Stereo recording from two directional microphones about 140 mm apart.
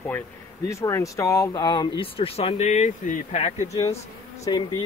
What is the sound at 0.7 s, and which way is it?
Speech, 20° left (ahead or behind).